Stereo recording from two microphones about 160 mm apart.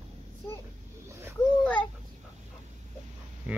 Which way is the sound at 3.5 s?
10° right (ahead or behind).